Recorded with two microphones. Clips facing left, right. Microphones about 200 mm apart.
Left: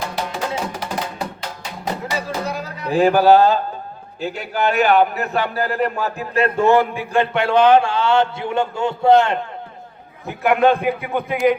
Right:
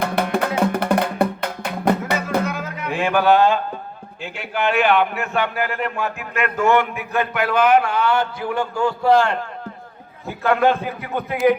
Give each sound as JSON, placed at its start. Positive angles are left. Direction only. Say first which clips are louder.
{"t": 0.0, "sound": "music", "louder": "right 5 dB", "side_deg": -60}
{"t": 2.4, "sound": "music", "louder": "right 1 dB", "side_deg": 35}
{"t": 4.2, "sound": "a man's voice", "louder": "left 3 dB", "side_deg": 40}